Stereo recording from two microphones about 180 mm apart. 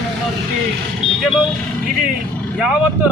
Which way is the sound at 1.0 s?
30° left (ahead or behind).